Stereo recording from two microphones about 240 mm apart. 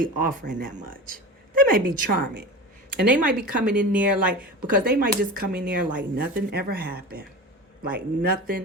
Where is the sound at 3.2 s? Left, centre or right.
Right.